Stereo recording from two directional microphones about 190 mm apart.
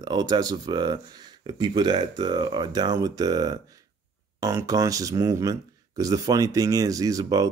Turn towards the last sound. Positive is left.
turn(degrees=-20)  # may be behind; listen again after turning